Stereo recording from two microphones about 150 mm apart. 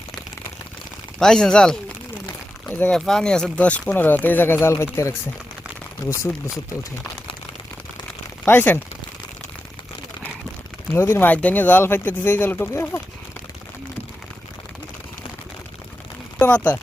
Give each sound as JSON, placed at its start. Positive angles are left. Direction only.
{"t": 1.2, "sound": "speech", "side_deg": 5}
{"t": 8.4, "sound": "speech", "side_deg": 15}
{"t": 10.9, "sound": "speech", "side_deg": 15}
{"t": 16.4, "sound": "speech", "side_deg": 10}